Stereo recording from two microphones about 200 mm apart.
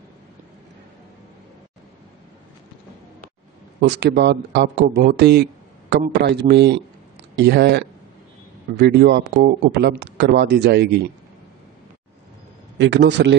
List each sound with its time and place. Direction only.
4.0 s a man's voice: 60° right (ahead or behind)
12.7 s speech: 65° right (ahead or behind)